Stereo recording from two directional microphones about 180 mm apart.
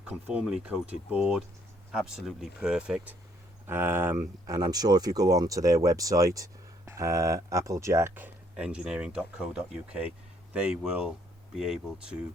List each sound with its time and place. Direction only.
0.0 s speech: 5° right (ahead or behind)